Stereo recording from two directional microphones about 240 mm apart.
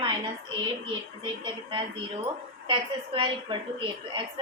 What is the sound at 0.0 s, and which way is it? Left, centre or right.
Speech, right.